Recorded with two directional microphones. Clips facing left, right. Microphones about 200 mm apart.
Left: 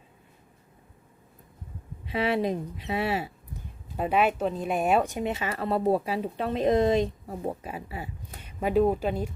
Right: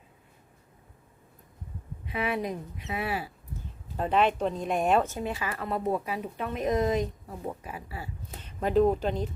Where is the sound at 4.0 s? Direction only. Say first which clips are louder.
Left 1 dB; 10° left (ahead or behind).